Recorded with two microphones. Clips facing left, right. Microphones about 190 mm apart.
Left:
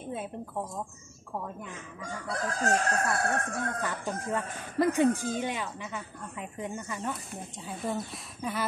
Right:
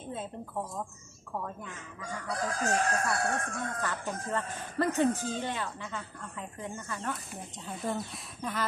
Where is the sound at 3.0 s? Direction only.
60° left (ahead or behind).